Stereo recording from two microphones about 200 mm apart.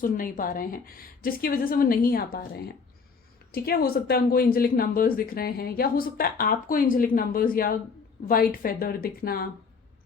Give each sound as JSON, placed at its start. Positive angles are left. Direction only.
{"t": 0.0, "sound": "speech", "side_deg": 45}